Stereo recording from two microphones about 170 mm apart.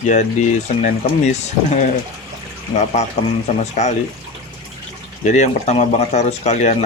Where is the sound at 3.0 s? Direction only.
45° left (ahead or behind).